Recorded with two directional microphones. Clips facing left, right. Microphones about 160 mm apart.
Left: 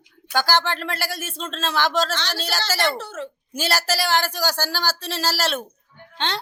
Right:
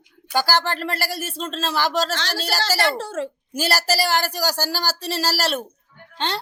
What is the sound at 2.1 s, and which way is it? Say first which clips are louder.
Speech: right 2 dB; 40° right (ahead or behind).